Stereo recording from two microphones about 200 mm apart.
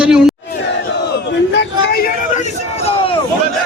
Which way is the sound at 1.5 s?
50° left (ahead or behind).